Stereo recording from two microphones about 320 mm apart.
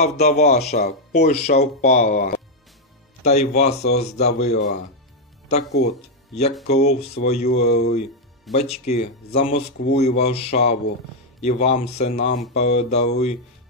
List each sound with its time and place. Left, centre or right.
0.0 s speech: left
5.9 s speech: left